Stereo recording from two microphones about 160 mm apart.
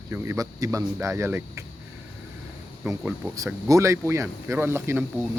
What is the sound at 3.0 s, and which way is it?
Speech, 10° right (ahead or behind).